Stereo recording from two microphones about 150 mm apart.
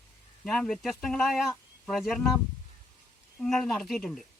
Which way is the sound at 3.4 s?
5° left (ahead or behind).